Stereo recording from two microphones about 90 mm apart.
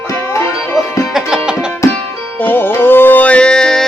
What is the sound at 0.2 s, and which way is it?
Music, 25° left (ahead or behind).